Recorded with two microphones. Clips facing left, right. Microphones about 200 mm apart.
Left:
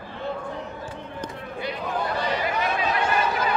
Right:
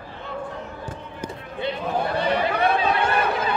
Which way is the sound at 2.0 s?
60° right (ahead or behind).